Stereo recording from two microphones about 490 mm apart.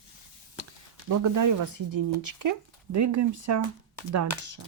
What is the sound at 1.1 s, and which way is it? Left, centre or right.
Speech, right.